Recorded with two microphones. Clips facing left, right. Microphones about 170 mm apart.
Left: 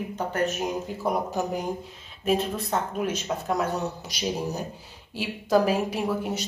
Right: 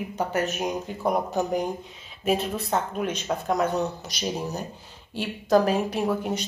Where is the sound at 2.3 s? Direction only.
Centre (ahead or behind).